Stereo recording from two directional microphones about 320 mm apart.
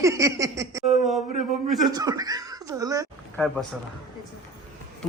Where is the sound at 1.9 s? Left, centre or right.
Centre.